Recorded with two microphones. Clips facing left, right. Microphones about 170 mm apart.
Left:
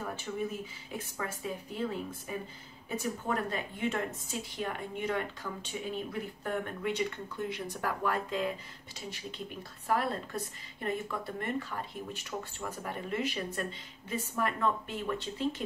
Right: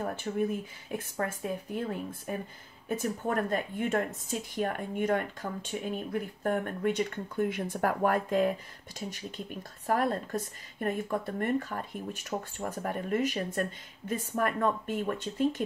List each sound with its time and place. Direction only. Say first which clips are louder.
0.0 s a woman's voice: right 5 dB; 55° right (ahead or behind)